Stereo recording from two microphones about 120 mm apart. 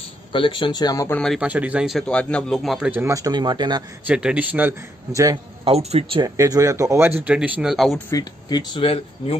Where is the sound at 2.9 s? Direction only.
25° right (ahead or behind).